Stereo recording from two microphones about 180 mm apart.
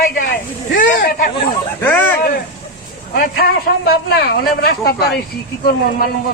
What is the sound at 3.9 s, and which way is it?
A man's voice, 60° left (ahead or behind).